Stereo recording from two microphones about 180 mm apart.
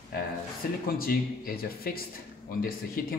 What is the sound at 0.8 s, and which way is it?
Speech, 55° left (ahead or behind).